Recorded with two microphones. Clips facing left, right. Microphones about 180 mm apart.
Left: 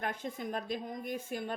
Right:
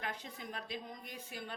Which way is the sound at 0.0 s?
50° left (ahead or behind).